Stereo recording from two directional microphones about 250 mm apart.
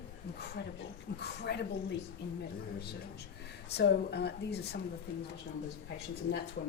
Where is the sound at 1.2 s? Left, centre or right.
Left.